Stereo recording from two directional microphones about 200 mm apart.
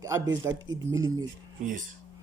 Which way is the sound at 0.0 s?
15° right (ahead or behind).